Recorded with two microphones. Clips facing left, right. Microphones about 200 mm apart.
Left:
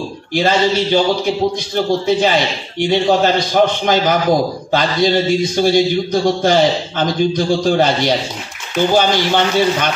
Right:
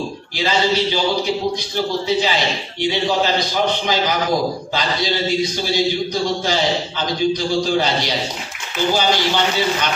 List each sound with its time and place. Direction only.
0.3 s a man's voice: 50° left (ahead or behind)